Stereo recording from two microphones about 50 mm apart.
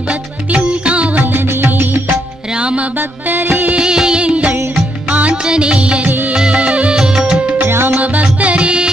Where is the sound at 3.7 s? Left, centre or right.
Centre.